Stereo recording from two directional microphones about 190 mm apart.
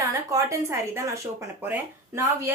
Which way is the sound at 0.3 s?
15° right (ahead or behind).